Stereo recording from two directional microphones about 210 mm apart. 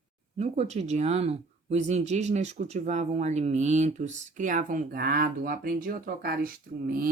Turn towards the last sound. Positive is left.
turn(degrees=-45)  # may be behind; listen again after turning